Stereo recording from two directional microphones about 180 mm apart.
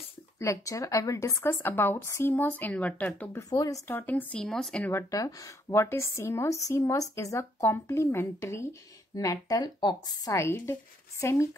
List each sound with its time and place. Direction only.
0.4 s speech: 15° left (ahead or behind)
3.4 s speech: 20° left (ahead or behind); by 4.9 s 5° left (ahead or behind)
4.9 s speech: 20° left (ahead or behind)